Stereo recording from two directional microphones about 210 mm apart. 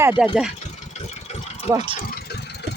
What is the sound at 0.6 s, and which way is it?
Engine, 35° left (ahead or behind).